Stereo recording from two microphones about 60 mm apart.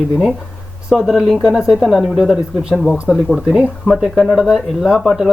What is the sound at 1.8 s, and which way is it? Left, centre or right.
Speech, centre.